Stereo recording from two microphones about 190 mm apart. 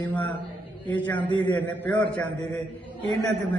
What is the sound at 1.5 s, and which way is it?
Speech, 10° left (ahead or behind).